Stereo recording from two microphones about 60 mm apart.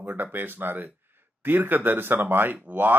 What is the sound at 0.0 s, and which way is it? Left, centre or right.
Speech, right.